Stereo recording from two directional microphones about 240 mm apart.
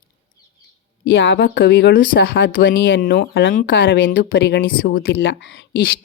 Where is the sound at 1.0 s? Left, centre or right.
Left.